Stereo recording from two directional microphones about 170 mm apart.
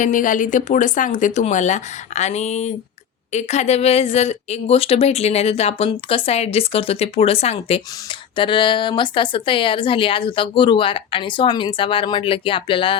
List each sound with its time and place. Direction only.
0.0 s a woman's voice: 50° left (ahead or behind); by 13.0 s 30° left (ahead or behind)